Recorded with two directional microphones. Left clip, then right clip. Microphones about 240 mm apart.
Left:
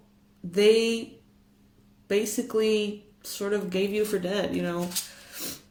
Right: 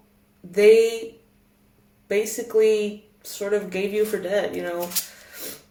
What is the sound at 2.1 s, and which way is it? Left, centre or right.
A woman's voice, left.